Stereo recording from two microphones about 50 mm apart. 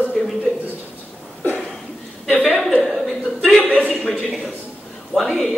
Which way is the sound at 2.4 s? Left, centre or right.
Centre.